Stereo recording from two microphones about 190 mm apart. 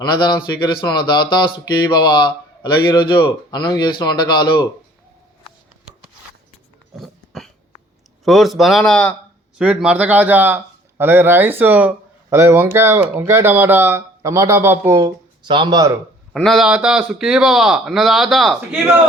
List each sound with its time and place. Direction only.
0.0 s speech: 20° left (ahead or behind)
6.9 s a sound: centre (ahead or behind)
8.2 s a man's voice: centre (ahead or behind)
9.6 s speech: 5° right (ahead or behind); by 15.9 s 20° right (ahead or behind)
16.3 s a man's voice: centre (ahead or behind)